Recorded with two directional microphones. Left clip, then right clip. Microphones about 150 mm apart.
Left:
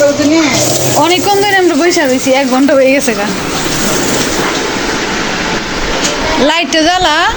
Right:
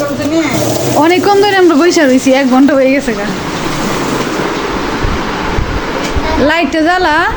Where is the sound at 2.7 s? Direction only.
15° right (ahead or behind).